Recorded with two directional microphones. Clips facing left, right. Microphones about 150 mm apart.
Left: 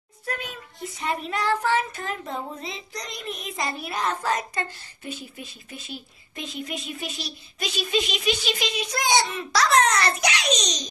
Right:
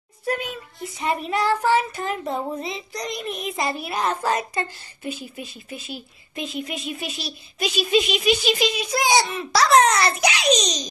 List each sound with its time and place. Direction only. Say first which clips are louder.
1.0 s a child's voice: right 4 dB; 10° right (ahead or behind)